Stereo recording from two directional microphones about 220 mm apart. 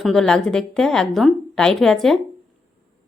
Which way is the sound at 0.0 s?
Centre (ahead or behind).